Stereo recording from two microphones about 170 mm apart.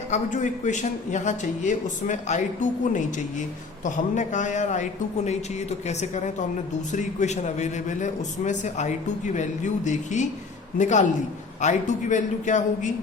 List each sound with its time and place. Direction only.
0.1 s a man's voice: 45° left (ahead or behind)